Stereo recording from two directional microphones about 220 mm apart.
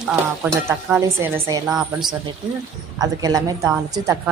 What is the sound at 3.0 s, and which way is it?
Speech, 15° right (ahead or behind).